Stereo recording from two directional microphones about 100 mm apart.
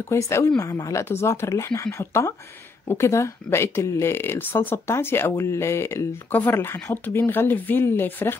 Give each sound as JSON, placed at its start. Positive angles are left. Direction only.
{"t": 0.1, "sound": "speech", "side_deg": 30}